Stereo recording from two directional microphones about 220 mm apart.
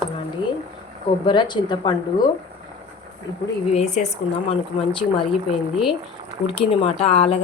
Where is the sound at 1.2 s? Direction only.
20° left (ahead or behind).